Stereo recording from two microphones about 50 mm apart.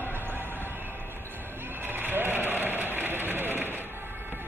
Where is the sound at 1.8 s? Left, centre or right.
Right.